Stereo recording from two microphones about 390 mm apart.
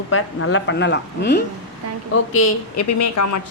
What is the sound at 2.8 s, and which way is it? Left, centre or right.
Speech, left.